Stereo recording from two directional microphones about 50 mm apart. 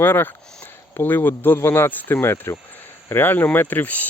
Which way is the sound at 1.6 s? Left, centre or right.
Left.